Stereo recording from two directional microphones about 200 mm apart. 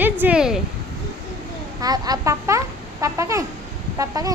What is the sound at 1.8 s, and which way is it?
A woman's voice, 20° right (ahead or behind).